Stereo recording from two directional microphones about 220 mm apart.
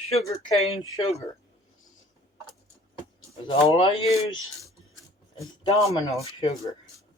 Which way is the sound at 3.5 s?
25° left (ahead or behind).